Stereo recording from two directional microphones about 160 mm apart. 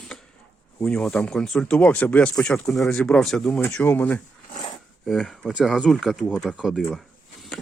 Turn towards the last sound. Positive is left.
turn(degrees=0)  # may be behind; listen again after turning